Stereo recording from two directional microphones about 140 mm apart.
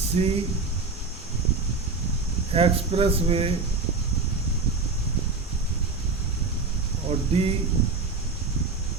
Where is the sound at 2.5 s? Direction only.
45° right (ahead or behind).